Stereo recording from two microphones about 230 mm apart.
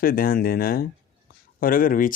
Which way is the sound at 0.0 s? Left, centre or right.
Left.